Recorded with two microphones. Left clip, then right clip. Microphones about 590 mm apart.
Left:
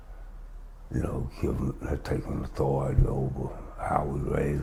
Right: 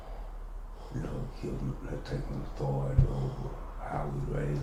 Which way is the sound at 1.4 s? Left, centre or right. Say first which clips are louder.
Left 9 dB; left.